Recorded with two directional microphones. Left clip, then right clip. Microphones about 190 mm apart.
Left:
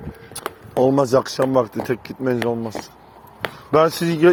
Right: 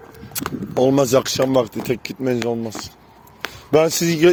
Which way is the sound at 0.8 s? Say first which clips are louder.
Right 1 dB; 35° right (ahead or behind).